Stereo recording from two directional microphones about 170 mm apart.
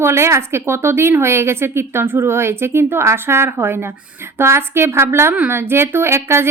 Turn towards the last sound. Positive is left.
turn(degrees=-15)  # may be behind; listen again after turning